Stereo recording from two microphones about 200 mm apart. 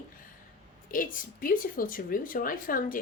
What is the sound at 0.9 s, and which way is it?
Speech, 45° left (ahead or behind).